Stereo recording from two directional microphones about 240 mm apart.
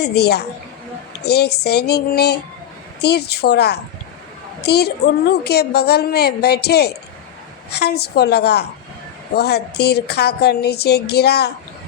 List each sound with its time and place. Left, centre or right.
0.0 s a woman's voice: left